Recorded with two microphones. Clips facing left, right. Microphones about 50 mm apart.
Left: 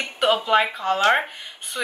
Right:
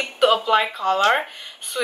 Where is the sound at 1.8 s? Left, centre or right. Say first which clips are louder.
Right 3 dB; centre.